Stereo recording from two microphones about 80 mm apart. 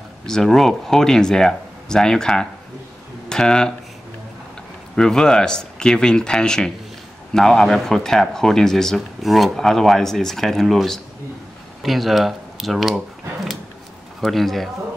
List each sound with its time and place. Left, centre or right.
0.3 s speech: centre
4.9 s speech: centre